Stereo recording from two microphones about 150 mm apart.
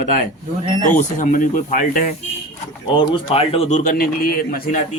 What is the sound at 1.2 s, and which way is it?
Speech, 60° left (ahead or behind).